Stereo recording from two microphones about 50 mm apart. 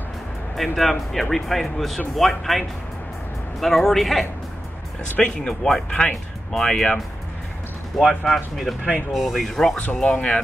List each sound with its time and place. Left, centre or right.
0.6 s speech: centre
3.6 s speech: centre
5.2 s speech: centre
8.0 s speech: centre
10.0 s speech: left